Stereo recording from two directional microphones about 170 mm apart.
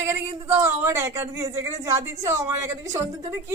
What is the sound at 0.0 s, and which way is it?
Speech, 15° right (ahead or behind).